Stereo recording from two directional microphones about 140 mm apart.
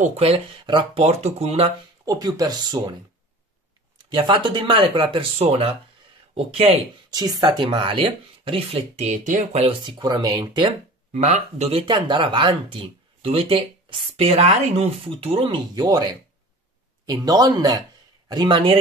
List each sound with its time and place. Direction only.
0.0 s speech: 45° right (ahead or behind)
1.0 s speech: 50° right (ahead or behind)
2.0 s speech: 25° right (ahead or behind)
4.1 s speech: 35° right (ahead or behind)
7.1 s speech: 30° right (ahead or behind)
8.5 s speech: 45° right (ahead or behind)
9.8 s speech: 30° right (ahead or behind)
11.1 s speech: 55° right (ahead or behind)
11.9 s speech: 35° right (ahead or behind)